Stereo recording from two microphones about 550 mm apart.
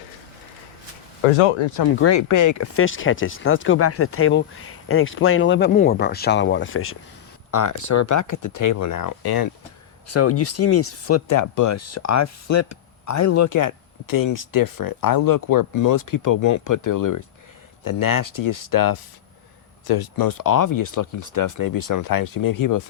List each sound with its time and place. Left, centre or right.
1.4 s speech: left
2.0 s speech: left
7.5 s speech: left
10.1 s speech: left